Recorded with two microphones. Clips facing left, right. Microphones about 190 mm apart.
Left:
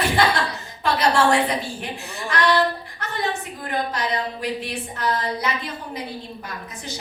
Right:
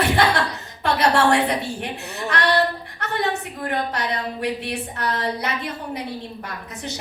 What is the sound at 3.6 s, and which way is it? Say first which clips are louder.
A woman's voice: even; 60° right (ahead or behind).